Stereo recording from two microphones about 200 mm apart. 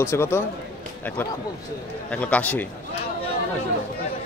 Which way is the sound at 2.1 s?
5° left (ahead or behind).